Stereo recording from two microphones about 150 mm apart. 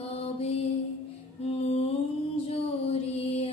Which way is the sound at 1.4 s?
45° left (ahead or behind).